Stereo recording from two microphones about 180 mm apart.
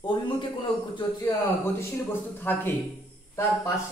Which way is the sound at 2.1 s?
10° left (ahead or behind).